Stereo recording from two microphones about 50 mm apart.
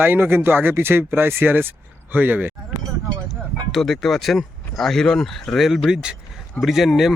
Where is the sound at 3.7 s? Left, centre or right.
Centre.